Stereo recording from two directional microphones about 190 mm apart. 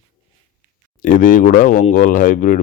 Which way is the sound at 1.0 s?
45° left (ahead or behind).